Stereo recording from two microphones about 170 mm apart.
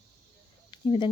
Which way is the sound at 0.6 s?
30° left (ahead or behind).